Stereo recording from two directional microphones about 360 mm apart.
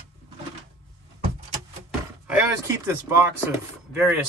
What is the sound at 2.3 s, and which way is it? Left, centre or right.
Speech, centre.